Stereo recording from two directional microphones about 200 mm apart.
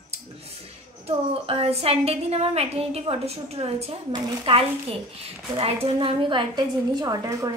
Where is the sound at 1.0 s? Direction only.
30° right (ahead or behind).